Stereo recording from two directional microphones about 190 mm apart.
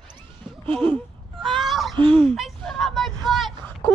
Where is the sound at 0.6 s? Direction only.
30° right (ahead or behind).